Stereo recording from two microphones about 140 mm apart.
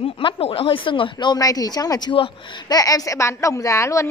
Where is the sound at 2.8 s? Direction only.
25° left (ahead or behind).